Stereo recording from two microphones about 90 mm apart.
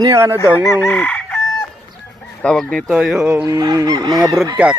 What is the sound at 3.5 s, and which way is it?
Fowl, 45° right (ahead or behind).